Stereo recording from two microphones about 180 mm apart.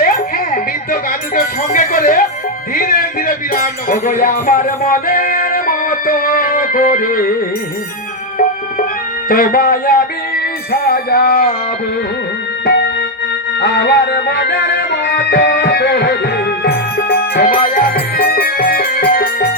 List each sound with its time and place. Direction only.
1.4 s music: 55° left (ahead or behind)
9.3 s music: 55° left (ahead or behind)
12.6 s music: 65° left (ahead or behind)